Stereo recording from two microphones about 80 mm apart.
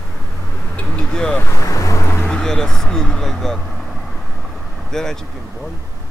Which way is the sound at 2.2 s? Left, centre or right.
Centre.